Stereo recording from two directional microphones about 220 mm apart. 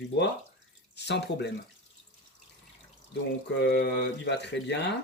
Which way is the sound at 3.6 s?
50° left (ahead or behind).